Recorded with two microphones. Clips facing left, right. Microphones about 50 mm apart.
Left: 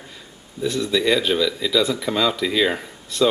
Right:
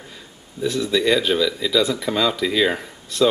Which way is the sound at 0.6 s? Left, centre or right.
Centre.